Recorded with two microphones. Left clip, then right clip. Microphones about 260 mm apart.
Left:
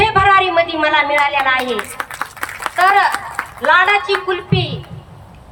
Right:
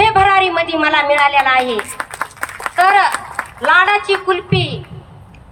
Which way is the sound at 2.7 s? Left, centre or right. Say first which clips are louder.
Right 1 dB; centre.